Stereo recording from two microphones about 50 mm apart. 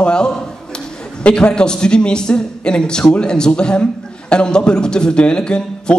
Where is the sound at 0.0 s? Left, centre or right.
Centre.